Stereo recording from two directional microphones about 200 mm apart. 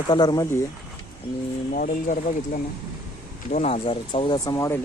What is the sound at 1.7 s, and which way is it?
Speech, 40° left (ahead or behind).